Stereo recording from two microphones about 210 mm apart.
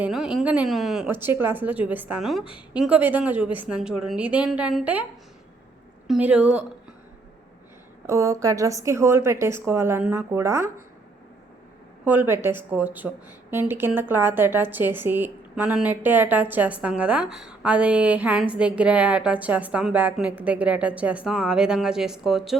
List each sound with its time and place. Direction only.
0.0 s speech: centre (ahead or behind)
6.1 s a woman's voice: 5° right (ahead or behind)
8.0 s speech: 15° right (ahead or behind)
12.0 s speech: 10° right (ahead or behind)